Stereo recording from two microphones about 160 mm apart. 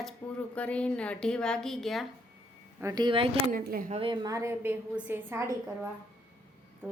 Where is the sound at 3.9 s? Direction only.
35° right (ahead or behind).